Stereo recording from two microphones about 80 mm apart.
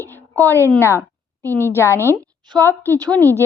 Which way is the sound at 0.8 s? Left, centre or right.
Left.